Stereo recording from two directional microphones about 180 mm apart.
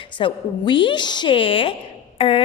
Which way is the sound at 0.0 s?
25° left (ahead or behind).